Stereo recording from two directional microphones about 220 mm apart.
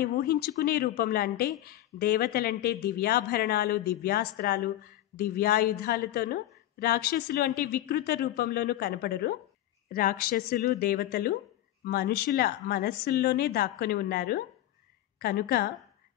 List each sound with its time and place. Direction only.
0.0 s speech: 45° left (ahead or behind)